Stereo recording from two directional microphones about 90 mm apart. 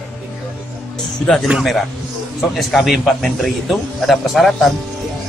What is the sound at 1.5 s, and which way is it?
A man's voice, centre (ahead or behind).